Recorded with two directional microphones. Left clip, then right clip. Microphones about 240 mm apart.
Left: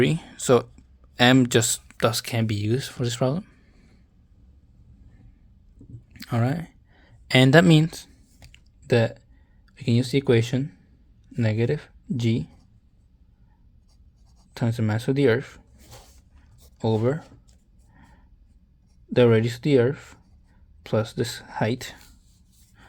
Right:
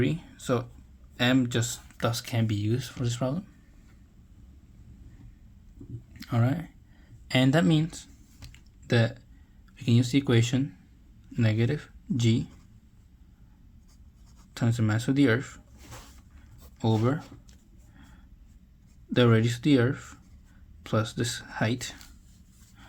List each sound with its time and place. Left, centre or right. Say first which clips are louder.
0.0 s speech: left 7 dB; left
6.1 s speech: left 3 dB; left
8.5 s a sound: left 6 dB; left
9.7 s speech: left 2 dB; left
14.5 s speech: left 2 dB; left
16.7 s speech: left 4 dB; left
17.9 s roaring cats: left 2 dB; left
19.1 s speech: left 5 dB; left